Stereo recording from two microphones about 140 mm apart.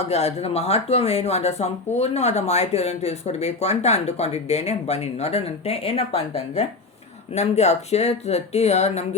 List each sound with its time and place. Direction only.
0.1 s speech: 45° left (ahead or behind)